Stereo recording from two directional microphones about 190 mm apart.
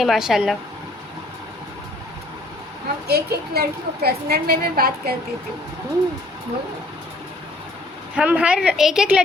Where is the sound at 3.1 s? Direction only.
55° right (ahead or behind).